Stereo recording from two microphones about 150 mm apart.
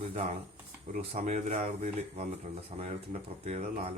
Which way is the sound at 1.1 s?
50° right (ahead or behind).